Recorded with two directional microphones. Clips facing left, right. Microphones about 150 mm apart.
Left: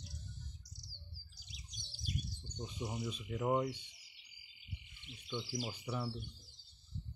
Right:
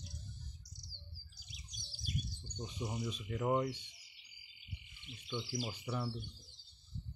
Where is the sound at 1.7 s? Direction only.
20° left (ahead or behind).